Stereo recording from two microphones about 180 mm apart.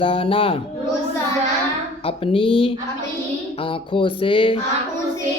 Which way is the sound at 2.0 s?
30° left (ahead or behind).